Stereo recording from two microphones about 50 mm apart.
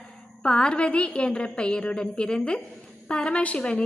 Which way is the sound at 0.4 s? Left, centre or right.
Centre.